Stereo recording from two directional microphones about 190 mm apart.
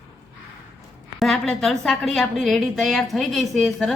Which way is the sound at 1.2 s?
Centre (ahead or behind).